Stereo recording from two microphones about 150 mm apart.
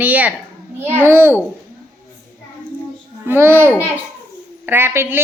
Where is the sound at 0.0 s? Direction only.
10° right (ahead or behind).